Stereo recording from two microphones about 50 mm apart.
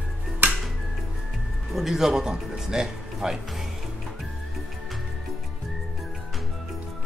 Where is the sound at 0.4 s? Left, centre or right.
Right.